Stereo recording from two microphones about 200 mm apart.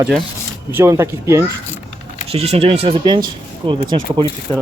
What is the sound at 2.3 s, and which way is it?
Speech, 30° right (ahead or behind).